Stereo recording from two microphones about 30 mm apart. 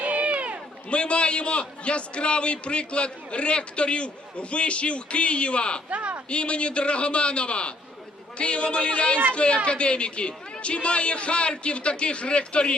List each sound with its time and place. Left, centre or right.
0.0 s a sound: right
0.9 s a man's voice: left
5.9 s speech: right
6.2 s a man's voice: left